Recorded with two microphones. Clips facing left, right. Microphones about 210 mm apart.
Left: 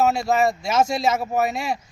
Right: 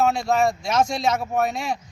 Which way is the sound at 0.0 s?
5° left (ahead or behind).